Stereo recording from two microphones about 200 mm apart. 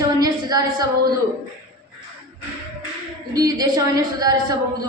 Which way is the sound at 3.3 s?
20° right (ahead or behind).